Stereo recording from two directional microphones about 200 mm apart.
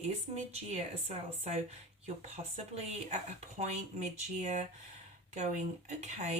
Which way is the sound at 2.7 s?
35° right (ahead or behind).